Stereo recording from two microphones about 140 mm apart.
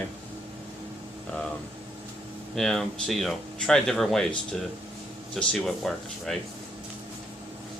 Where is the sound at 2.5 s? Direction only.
5° left (ahead or behind).